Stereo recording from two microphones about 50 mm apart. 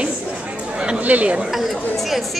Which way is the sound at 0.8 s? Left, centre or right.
Right.